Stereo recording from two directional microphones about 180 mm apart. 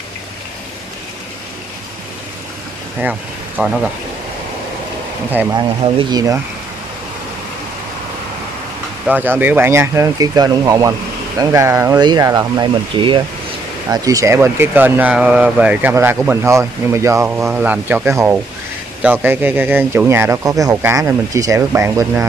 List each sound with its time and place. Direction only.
3.0 s speech: 10° right (ahead or behind)
5.5 s speech: 25° right (ahead or behind)
9.0 s speech: 10° right (ahead or behind)